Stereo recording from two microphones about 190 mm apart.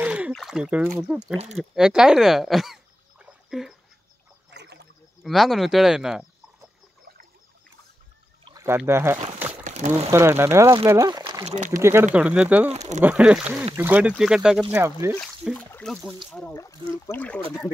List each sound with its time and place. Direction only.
0.0 s a sound: 5° right (ahead or behind)
0.3 s speech: centre (ahead or behind)
4.5 s a sound: 60° right (ahead or behind)
5.2 s speech: centre (ahead or behind)
8.5 s speech: 15° right (ahead or behind)
9.7 s crumpling: 40° right (ahead or behind)
10.1 s speech: 15° right (ahead or behind)
11.4 s speech: 40° right (ahead or behind)
11.8 s speech: 10° right (ahead or behind)
15.1 s speech: 5° left (ahead or behind)